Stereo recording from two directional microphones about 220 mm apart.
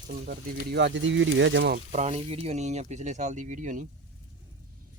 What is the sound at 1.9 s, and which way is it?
Speech, 30° right (ahead or behind).